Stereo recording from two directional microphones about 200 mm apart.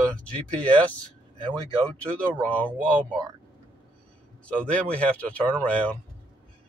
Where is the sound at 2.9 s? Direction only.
20° right (ahead or behind).